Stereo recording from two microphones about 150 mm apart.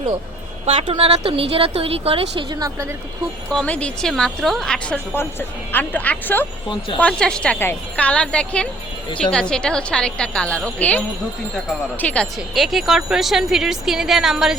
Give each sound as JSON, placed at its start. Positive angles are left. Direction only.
{"t": 0.6, "sound": "a woman's voice", "side_deg": -35}
{"t": 3.5, "sound": "a woman's voice", "side_deg": 5}